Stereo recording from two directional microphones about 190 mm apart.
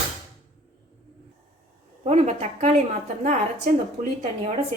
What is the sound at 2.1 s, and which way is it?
Speech, 35° right (ahead or behind).